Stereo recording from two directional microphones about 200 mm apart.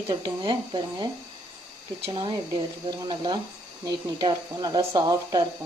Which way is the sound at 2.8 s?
20° right (ahead or behind).